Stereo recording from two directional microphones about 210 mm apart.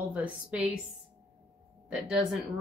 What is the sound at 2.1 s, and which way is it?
Speech, centre (ahead or behind).